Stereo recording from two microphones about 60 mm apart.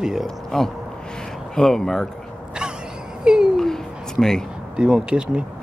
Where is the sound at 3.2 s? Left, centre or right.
Centre.